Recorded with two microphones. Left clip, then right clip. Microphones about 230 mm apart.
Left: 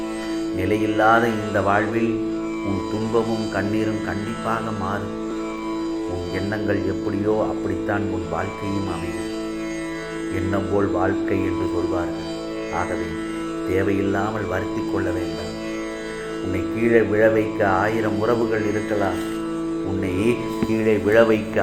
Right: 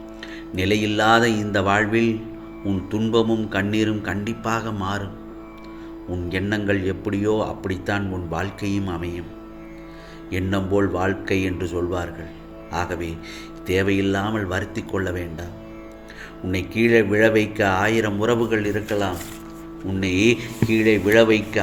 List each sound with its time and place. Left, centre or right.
0.6 s speech: right
3.5 s speech: right
6.3 s speech: right
7.9 s speech: right
10.3 s speech: right
13.7 s speech: right
16.5 s speech: right
20.2 s speech: right